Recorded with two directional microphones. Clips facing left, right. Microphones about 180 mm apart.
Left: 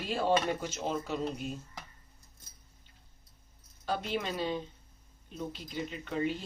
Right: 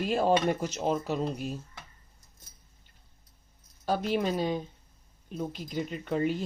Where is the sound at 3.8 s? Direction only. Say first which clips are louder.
Right 6 dB; 45° right (ahead or behind).